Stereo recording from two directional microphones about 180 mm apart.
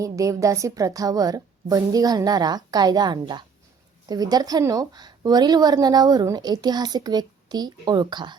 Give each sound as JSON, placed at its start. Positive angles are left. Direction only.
{"t": 0.0, "sound": "a woman's voice", "side_deg": -20}